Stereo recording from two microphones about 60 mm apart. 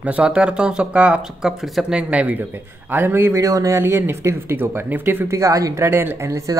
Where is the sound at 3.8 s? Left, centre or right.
Right.